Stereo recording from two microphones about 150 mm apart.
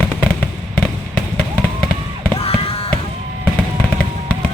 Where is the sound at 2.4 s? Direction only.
40° left (ahead or behind).